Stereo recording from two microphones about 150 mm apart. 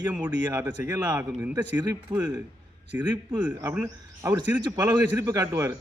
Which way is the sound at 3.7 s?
15° right (ahead or behind).